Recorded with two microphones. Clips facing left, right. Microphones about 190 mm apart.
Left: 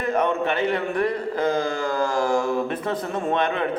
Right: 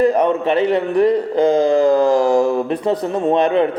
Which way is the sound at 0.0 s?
35° right (ahead or behind).